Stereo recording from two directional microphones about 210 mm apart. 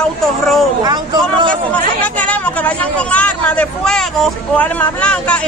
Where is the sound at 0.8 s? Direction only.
20° right (ahead or behind).